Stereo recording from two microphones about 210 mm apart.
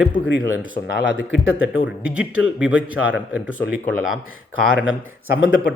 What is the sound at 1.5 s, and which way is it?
A man's voice, 5° right (ahead or behind).